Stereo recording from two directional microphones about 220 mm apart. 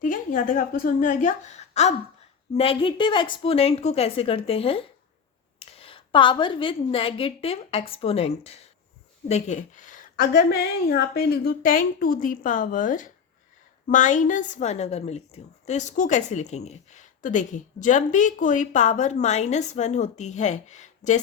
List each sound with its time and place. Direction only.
0.0 s a woman's voice: 35° left (ahead or behind)